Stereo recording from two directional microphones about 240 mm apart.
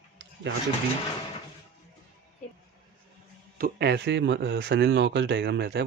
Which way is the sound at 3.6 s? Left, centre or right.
Right.